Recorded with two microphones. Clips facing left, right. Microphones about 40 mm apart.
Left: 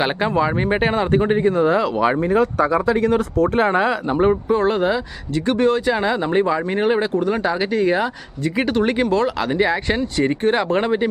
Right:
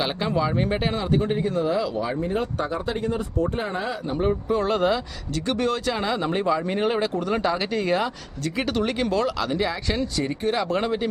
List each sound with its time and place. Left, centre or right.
0.0 s speech: left
2.0 s speech: left
3.0 s speech: left
4.4 s speech: left
4.7 s speech: centre; by 10.8 s left
10.8 s speech: left